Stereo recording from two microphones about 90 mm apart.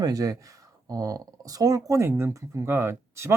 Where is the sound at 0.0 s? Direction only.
40° right (ahead or behind).